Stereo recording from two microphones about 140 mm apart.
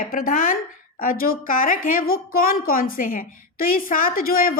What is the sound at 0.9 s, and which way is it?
A woman's voice, 90° left.